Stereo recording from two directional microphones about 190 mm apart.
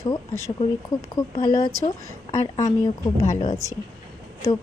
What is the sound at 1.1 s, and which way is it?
A woman's voice, 20° left (ahead or behind).